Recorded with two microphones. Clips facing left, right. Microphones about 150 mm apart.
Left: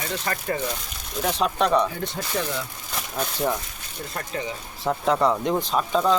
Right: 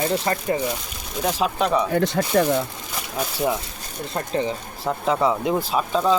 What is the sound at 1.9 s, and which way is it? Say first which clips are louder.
Speech: right 10 dB; 75° right (ahead or behind).